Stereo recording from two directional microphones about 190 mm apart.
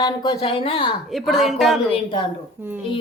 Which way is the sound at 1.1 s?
Centre (ahead or behind).